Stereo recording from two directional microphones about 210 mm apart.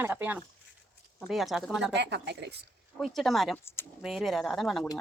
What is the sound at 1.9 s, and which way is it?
Speech, 55° right (ahead or behind).